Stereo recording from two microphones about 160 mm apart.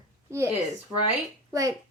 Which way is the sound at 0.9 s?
Centre (ahead or behind).